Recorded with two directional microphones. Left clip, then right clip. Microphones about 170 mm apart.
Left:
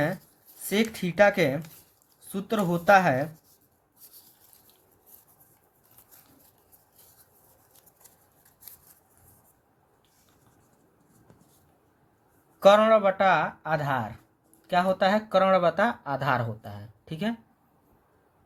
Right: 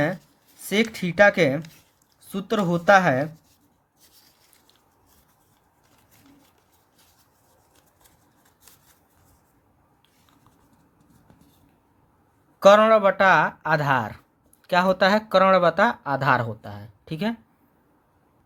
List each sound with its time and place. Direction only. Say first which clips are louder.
0.7 s speech: right 4 dB; 20° right (ahead or behind)
12.5 s speech: right 4 dB; 25° right (ahead or behind)